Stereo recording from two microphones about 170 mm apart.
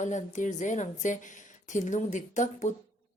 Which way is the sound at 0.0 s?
45° left (ahead or behind).